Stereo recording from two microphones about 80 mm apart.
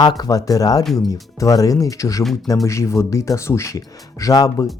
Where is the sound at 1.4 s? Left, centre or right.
Left.